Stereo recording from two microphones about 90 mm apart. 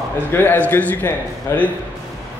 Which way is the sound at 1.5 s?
30° left (ahead or behind).